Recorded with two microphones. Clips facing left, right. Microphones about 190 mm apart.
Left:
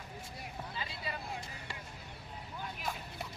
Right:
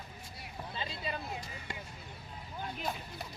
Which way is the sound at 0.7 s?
25° right (ahead or behind).